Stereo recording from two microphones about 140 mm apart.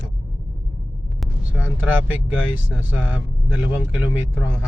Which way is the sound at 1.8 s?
10° right (ahead or behind).